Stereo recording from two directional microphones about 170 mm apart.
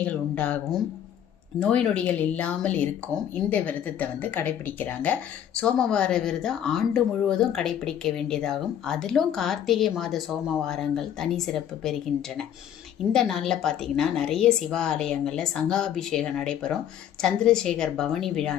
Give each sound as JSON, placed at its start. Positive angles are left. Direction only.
{"t": 0.0, "sound": "speech", "side_deg": 10}
{"t": 13.1, "sound": "speech", "side_deg": 0}